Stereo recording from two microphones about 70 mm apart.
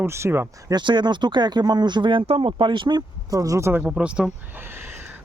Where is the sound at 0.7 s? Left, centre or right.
Right.